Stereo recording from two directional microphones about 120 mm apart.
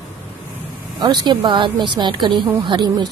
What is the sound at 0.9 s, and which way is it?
Speech, 40° right (ahead or behind).